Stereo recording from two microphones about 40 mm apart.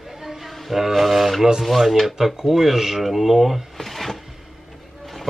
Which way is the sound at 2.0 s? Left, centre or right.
Centre.